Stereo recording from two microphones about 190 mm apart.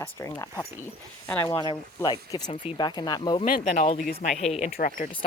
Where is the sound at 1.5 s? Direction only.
25° left (ahead or behind).